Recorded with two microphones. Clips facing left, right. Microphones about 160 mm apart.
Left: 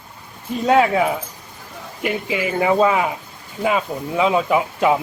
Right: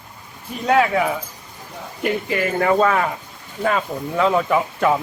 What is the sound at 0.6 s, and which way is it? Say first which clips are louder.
Speech: left 2 dB; 20° left (ahead or behind).